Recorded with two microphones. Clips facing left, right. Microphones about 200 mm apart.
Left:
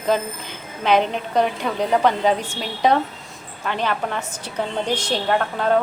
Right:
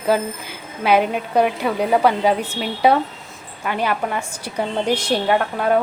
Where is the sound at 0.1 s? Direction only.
5° right (ahead or behind).